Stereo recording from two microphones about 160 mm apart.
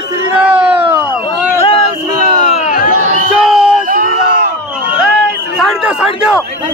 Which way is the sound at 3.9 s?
60° right (ahead or behind).